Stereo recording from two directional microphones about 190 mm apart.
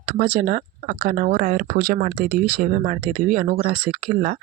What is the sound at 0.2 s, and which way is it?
Speech, 45° right (ahead or behind).